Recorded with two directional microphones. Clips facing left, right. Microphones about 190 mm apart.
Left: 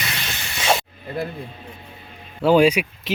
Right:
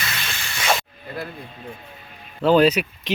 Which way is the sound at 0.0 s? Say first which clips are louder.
Left 1 dB; 20° left (ahead or behind).